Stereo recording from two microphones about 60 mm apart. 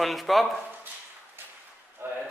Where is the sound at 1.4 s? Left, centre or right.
Right.